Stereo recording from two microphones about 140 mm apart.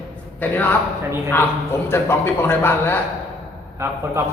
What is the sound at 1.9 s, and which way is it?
A man's voice, 15° left (ahead or behind).